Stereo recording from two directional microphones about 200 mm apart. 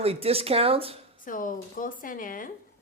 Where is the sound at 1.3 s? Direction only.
40° left (ahead or behind).